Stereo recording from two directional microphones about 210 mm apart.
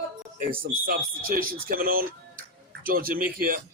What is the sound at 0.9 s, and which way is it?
Speech, 45° right (ahead or behind).